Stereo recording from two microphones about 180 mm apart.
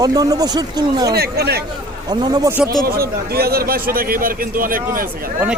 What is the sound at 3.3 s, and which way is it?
A man's voice, 60° right (ahead or behind).